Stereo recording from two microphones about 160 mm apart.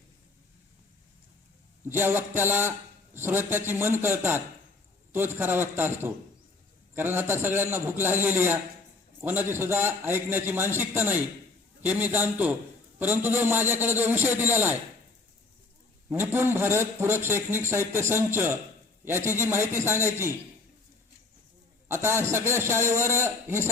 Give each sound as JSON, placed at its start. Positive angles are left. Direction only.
{"t": 1.8, "sound": "a man's voice", "side_deg": -15}
{"t": 16.0, "sound": "a man's voice", "side_deg": -15}
{"t": 21.8, "sound": "a man's voice", "side_deg": -15}